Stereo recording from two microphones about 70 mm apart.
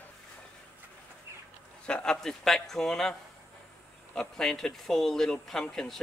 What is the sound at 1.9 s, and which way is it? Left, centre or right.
Speech, centre.